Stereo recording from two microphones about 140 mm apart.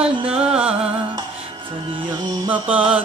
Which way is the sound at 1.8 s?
30° right (ahead or behind).